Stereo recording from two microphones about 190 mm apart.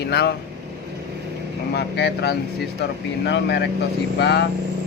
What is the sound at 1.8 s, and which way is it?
A man's voice, 60° left (ahead or behind).